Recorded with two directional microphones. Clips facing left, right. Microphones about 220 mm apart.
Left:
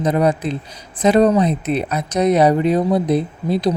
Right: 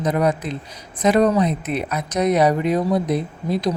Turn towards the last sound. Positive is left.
turn(degrees=30)  # may be behind; listen again after turning